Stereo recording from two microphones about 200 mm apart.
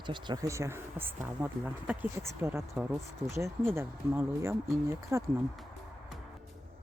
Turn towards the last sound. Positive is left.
turn(degrees=-15)  # may be behind; listen again after turning